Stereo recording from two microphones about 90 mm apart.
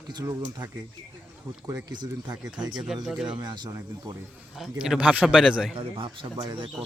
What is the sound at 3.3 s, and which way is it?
Speech, 55° right (ahead or behind).